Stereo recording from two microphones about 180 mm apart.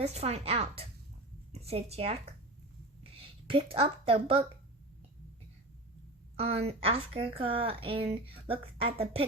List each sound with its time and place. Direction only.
0.0 s a woman's voice: 35° right (ahead or behind)
6.3 s speech: 35° right (ahead or behind)